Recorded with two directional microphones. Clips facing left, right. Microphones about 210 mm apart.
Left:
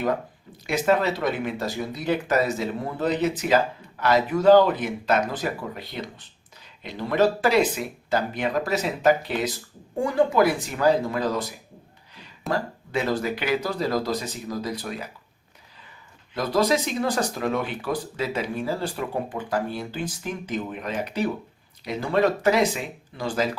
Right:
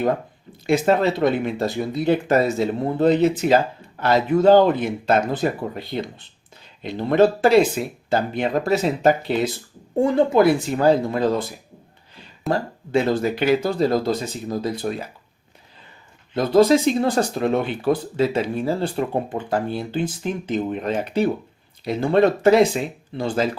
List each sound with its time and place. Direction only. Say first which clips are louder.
0.5 s speech: right 4 dB; 25° right (ahead or behind)
16.3 s speech: right 7 dB; 25° right (ahead or behind)